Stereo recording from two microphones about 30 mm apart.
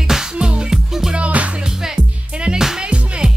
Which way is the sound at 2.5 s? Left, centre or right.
Centre.